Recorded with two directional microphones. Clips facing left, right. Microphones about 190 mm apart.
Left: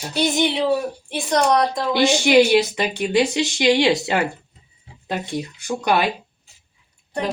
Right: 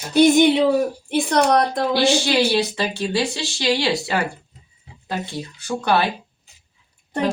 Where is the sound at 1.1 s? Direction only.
60° right (ahead or behind).